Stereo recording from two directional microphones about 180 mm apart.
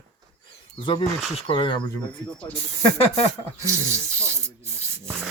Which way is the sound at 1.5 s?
30° left (ahead or behind).